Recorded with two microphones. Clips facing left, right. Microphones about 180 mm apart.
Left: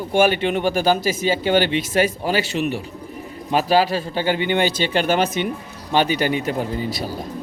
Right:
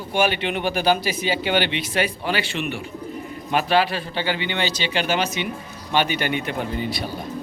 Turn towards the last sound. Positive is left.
turn(degrees=40)  # may be behind; listen again after turning